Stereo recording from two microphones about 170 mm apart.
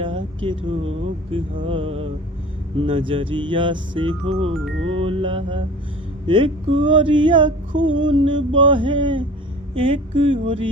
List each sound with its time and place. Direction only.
0.0 s speech: 30° right (ahead or behind)
1.6 s music: 30° right (ahead or behind)
6.2 s speech: 30° right (ahead or behind)
9.7 s music: 30° right (ahead or behind)